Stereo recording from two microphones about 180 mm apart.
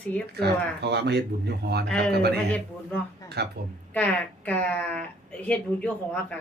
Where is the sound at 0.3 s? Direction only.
65° right (ahead or behind).